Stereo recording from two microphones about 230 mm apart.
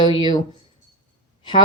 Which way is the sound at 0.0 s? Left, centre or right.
Left.